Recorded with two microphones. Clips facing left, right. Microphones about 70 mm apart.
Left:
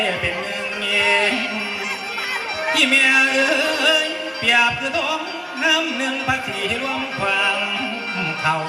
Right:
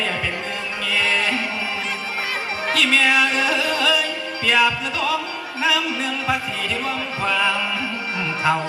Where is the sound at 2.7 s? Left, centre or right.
Centre.